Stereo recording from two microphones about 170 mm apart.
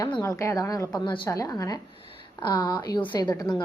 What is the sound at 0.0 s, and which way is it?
A woman's voice, 20° left (ahead or behind).